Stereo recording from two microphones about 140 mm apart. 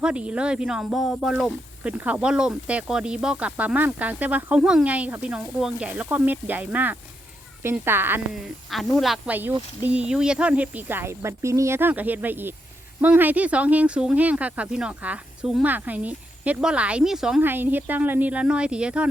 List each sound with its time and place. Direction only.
0.0 s speech: 10° right (ahead or behind)
8.3 s speech: centre (ahead or behind)
17.4 s speech: 15° right (ahead or behind)